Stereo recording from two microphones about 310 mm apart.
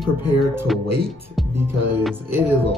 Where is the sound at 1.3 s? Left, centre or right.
Centre.